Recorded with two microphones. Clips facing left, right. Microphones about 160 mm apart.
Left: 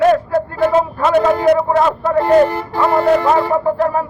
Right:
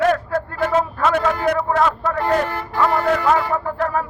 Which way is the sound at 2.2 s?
20° left (ahead or behind).